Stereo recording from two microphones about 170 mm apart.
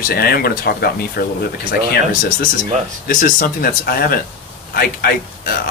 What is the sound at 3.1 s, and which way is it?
Speech, 55° left (ahead or behind).